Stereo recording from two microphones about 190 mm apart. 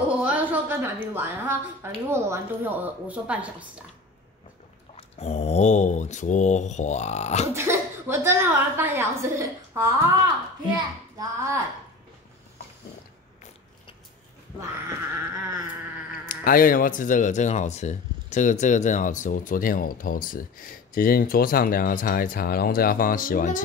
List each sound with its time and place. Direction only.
0.2 s a sound: 10° right (ahead or behind)
1.1 s speech: 10° right (ahead or behind)
4.9 s mantra: 35° left (ahead or behind)
7.5 s a woman's voice: 15° right (ahead or behind)
16.3 s speech: 50° left (ahead or behind)